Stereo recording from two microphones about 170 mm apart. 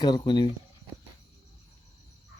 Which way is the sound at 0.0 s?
25° left (ahead or behind).